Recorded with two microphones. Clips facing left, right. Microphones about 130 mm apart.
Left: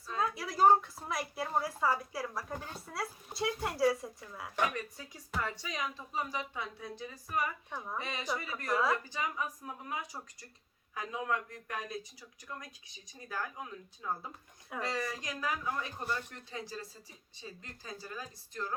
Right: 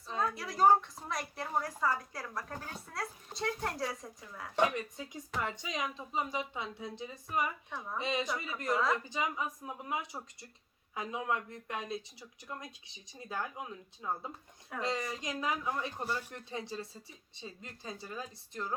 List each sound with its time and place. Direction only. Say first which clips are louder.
0.2 s a woman's voice: left 1 dB; centre (ahead or behind)
4.5 s speech: right 3 dB; 25° right (ahead or behind)